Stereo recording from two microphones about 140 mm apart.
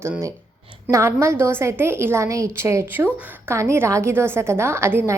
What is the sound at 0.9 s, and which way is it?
A woman's voice, 20° right (ahead or behind).